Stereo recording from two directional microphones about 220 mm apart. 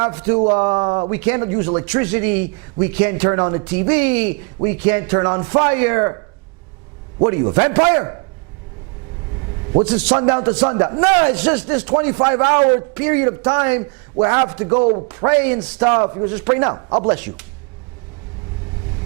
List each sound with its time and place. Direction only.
0.0 s a man's voice: 15° right (ahead or behind)
0.9 s a man's voice: 25° right (ahead or behind)
1.1 s a man's voice: 15° right (ahead or behind)
7.5 s a man's voice: 15° right (ahead or behind)
9.7 s a man's voice: 15° right (ahead or behind)